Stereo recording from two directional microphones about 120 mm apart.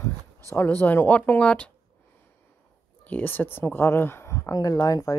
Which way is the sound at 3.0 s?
15° left (ahead or behind).